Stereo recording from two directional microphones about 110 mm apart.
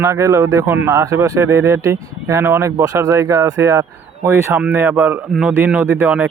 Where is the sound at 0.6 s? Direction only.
20° right (ahead or behind).